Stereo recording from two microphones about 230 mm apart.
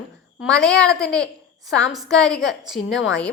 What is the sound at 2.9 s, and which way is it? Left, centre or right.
Speech, left.